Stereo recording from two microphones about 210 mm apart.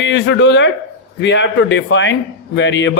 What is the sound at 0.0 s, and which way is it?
A man's voice, 60° left (ahead or behind).